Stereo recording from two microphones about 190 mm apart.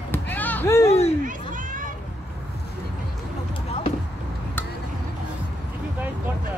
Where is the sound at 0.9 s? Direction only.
35° left (ahead or behind).